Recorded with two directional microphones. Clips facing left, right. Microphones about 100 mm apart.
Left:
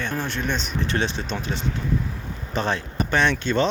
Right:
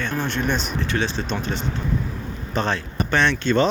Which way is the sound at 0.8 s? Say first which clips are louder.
Right 1 dB; 25° left (ahead or behind).